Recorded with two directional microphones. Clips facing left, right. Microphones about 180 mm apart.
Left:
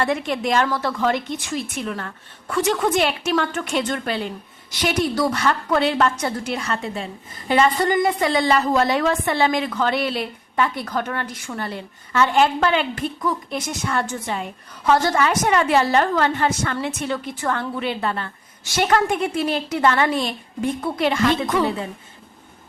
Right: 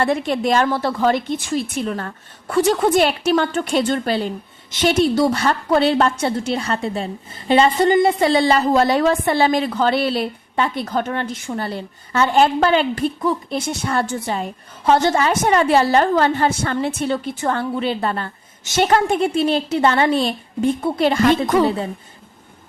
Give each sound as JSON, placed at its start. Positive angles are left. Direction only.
{"t": 0.0, "sound": "a woman's voice", "side_deg": -35}
{"t": 18.6, "sound": "a woman's voice", "side_deg": -25}